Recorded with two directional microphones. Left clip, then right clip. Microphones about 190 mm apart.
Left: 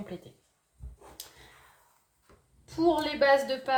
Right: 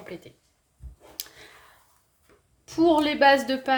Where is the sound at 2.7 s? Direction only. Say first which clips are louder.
Right 6 dB; 55° right (ahead or behind).